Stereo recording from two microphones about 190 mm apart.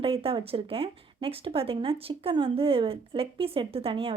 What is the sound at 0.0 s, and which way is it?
Speech, 30° right (ahead or behind).